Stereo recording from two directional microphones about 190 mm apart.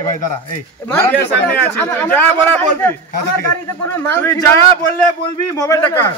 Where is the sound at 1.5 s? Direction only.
10° left (ahead or behind).